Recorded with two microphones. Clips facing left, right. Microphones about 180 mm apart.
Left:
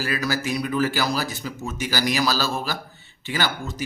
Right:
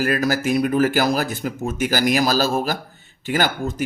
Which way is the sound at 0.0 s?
50° right (ahead or behind).